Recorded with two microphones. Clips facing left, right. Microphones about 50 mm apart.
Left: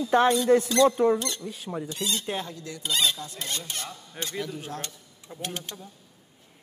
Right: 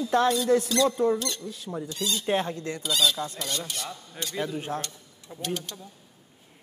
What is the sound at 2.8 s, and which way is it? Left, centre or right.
Speech, left.